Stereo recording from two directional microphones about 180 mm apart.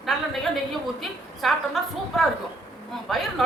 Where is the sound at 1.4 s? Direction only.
Centre (ahead or behind).